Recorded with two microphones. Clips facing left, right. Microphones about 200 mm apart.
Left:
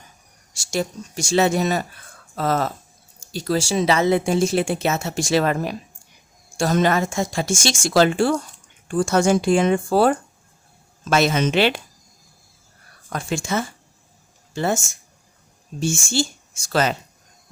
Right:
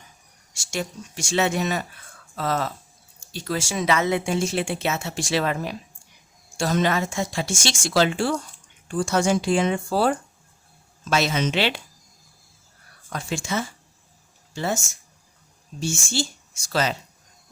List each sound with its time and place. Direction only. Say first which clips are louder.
0.5 s a woman's voice: left 5 dB; 35° left (ahead or behind)
13.1 s a woman's voice: left 4 dB; 50° left (ahead or behind)
15.8 s a woman's voice: left 4 dB; 50° left (ahead or behind)